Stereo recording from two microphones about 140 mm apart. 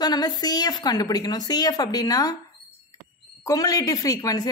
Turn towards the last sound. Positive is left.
turn(degrees=25)  # may be behind; listen again after turning